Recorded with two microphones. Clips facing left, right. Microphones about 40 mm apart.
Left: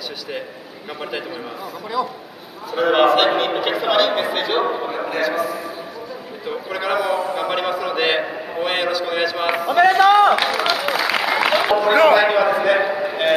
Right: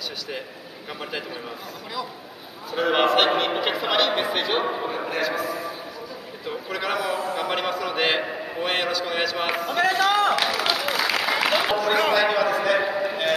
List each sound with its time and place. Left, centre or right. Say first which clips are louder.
2.7 s a man's voice: left 5 dB; centre
9.8 s applause: left 9 dB; left
12.0 s a man's voice: left 8 dB; centre